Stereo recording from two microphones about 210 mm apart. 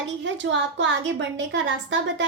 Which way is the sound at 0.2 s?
60° right (ahead or behind).